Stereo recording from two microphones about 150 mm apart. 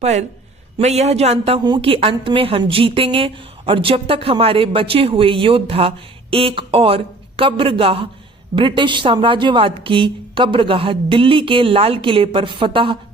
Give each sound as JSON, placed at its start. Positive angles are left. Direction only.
{"t": 0.0, "sound": "a man's voice", "side_deg": -50}